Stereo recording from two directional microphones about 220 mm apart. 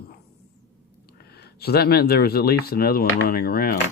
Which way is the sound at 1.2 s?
45° left (ahead or behind).